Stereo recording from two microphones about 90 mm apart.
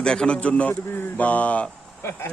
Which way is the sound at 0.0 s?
10° left (ahead or behind).